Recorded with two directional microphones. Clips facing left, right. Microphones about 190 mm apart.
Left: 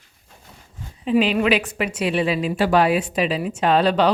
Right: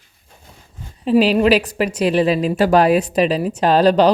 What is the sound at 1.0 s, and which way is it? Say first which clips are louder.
A woman's voice: right 5 dB; 35° right (ahead or behind).